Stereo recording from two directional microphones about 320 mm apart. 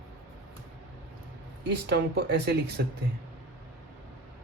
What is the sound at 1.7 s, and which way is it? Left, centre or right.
Speech, right.